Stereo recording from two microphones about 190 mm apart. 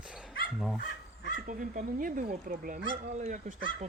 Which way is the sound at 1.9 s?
45° right (ahead or behind).